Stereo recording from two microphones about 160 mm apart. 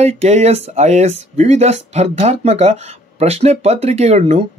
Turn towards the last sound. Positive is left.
turn(degrees=-40)  # may be behind; listen again after turning